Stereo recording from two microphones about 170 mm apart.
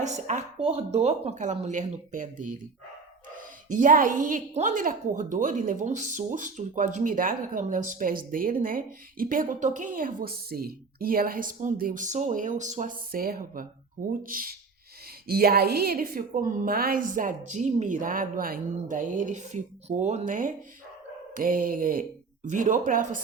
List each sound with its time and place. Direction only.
0.0 s a woman's voice: 45° right (ahead or behind)